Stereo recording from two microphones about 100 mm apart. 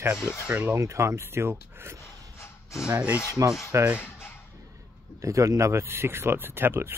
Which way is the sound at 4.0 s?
25° left (ahead or behind).